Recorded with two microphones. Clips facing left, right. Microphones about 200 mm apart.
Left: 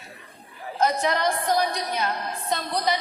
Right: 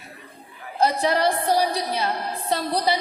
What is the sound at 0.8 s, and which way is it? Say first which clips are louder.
A woman's voice: right 3 dB; 35° right (ahead or behind).